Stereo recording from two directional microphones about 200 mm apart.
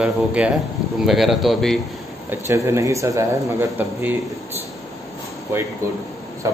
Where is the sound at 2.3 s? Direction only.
15° right (ahead or behind).